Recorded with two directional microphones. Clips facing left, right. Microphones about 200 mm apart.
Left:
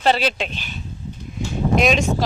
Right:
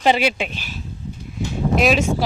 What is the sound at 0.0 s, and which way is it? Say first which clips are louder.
Speech: right 1 dB; 10° right (ahead or behind).